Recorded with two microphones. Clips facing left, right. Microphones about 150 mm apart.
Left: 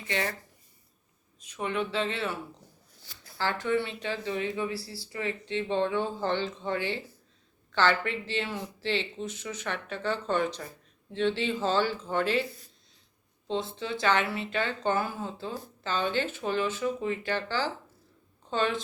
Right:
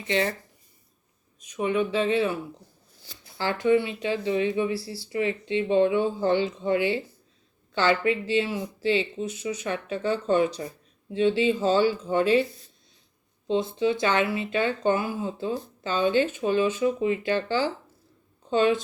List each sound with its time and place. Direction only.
0.1 s speech: 20° right (ahead or behind)
1.4 s speech: 15° right (ahead or behind)